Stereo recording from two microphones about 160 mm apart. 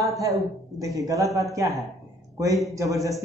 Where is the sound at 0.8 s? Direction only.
20° right (ahead or behind).